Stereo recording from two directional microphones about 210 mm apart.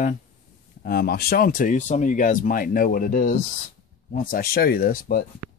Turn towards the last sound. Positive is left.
turn(degrees=45)  # may be behind; listen again after turning